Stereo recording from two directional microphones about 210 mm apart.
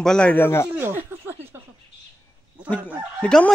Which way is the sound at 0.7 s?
10° right (ahead or behind).